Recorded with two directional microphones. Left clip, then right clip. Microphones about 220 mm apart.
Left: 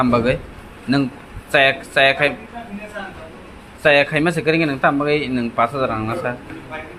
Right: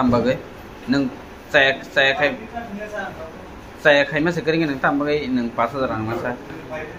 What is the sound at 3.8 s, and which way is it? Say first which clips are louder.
Speech: left 1 dB; 50° left (ahead or behind).